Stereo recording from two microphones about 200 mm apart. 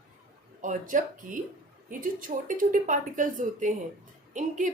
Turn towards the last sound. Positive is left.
turn(degrees=-40)  # may be behind; listen again after turning